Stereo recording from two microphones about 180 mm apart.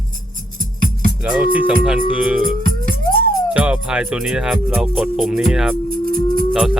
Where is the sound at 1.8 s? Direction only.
5° right (ahead or behind).